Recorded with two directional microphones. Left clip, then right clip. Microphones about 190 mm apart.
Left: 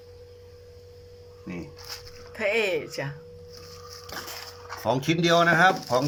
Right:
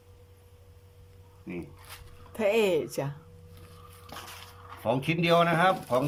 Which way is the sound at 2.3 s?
15° right (ahead or behind).